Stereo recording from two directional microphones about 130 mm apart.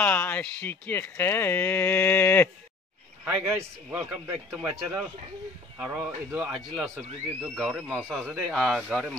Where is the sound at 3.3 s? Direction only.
15° right (ahead or behind).